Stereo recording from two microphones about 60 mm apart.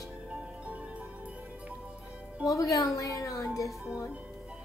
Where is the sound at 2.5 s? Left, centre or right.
Left.